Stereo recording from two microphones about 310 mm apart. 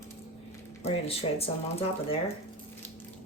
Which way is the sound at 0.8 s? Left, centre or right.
Centre.